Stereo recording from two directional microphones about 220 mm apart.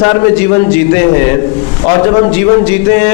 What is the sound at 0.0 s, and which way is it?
A man's voice, 15° left (ahead or behind).